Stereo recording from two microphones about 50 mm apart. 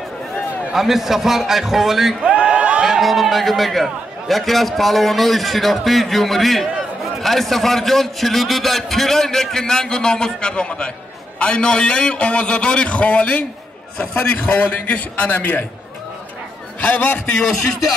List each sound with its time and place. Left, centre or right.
0.7 s a man's voice: centre
2.3 s a sound: right
2.8 s a man's voice: centre; by 15.6 s left
16.8 s a man's voice: left
17.4 s a man's voice: centre